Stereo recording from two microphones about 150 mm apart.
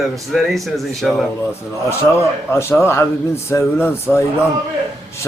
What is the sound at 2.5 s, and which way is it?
Speech, 15° left (ahead or behind).